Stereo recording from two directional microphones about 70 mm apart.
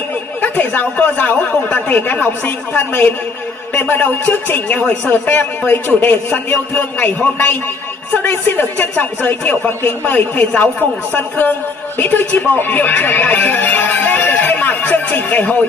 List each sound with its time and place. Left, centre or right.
0.4 s a man's voice: left